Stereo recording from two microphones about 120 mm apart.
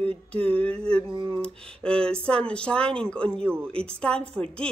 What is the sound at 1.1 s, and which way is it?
Speech, 40° right (ahead or behind).